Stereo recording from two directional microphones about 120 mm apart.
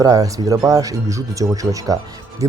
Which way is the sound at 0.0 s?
30° right (ahead or behind).